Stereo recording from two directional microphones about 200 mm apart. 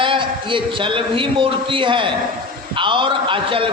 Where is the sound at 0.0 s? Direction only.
25° right (ahead or behind).